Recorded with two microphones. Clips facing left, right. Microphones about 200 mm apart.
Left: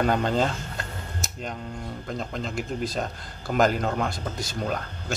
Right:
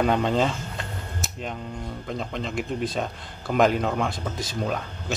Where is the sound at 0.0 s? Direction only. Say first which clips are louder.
Right 1 dB; centre (ahead or behind).